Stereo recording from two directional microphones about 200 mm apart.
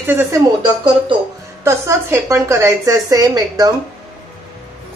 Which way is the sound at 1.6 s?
15° right (ahead or behind).